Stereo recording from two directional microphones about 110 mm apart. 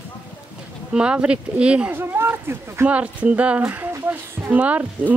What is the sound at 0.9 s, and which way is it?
Speech, 10° right (ahead or behind).